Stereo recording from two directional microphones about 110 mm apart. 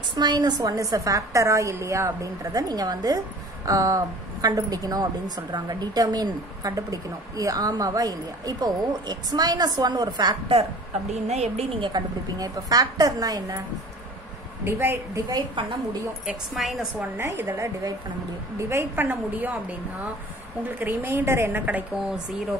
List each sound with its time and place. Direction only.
0.1 s a woman's voice: 40° right (ahead or behind)
11.2 s a woman's voice: 90° right
11.8 s a woman's voice: 35° right (ahead or behind)
14.6 s a woman's voice: 20° right (ahead or behind)
15.2 s a woman's voice: 40° right (ahead or behind)
16.5 s a woman's voice: centre (ahead or behind)
17.2 s a woman's voice: 25° right (ahead or behind)
20.6 s a woman's voice: 20° right (ahead or behind)